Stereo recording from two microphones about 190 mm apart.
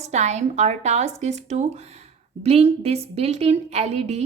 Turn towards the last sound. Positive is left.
turn(degrees=-35)  # may be behind; listen again after turning